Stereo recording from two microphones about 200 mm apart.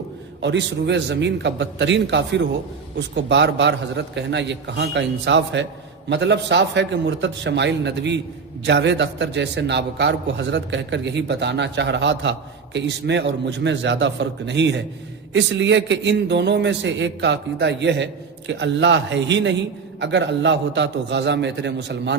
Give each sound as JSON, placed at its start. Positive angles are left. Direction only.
{"t": 0.4, "sound": "a man's voice", "side_deg": -60}